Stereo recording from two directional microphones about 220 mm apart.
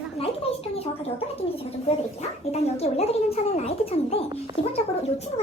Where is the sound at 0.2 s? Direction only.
25° left (ahead or behind).